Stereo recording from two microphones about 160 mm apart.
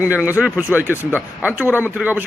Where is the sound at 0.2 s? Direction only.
5° right (ahead or behind).